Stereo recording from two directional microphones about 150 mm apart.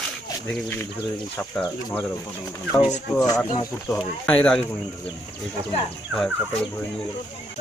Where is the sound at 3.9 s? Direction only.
10° left (ahead or behind).